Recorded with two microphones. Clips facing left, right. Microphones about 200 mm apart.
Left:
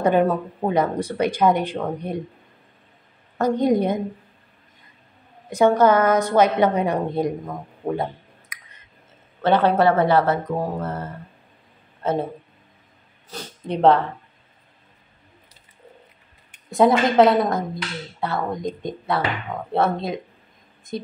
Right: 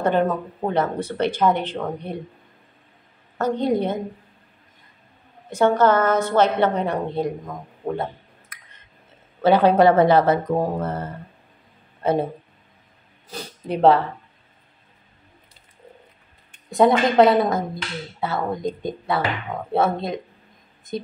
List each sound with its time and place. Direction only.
0.0 s a woman's voice: 10° left (ahead or behind)
3.3 s a woman's voice: 10° left (ahead or behind)
5.5 s a woman's voice: 10° left (ahead or behind)
9.4 s speech: 10° right (ahead or behind)
12.0 s speech: 10° right (ahead or behind)
13.3 s speech: 5° right (ahead or behind)
16.7 s speech: centre (ahead or behind)